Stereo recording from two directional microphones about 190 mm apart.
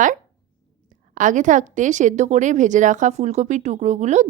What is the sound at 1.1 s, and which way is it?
A woman's voice, 40° right (ahead or behind).